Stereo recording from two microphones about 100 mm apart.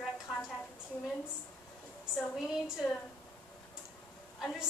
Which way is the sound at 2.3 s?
5° right (ahead or behind).